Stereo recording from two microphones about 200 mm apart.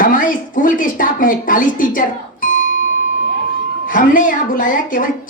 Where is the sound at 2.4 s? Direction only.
40° left (ahead or behind).